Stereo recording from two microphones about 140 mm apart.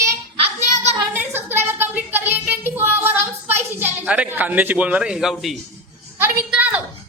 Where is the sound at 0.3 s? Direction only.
50° right (ahead or behind).